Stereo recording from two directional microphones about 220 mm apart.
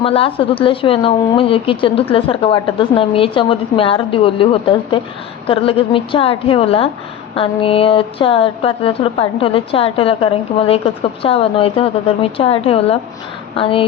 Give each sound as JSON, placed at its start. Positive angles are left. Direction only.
{"t": 0.0, "sound": "a woman's voice", "side_deg": 25}